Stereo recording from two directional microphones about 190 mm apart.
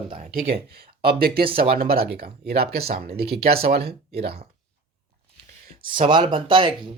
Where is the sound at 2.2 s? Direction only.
55° right (ahead or behind).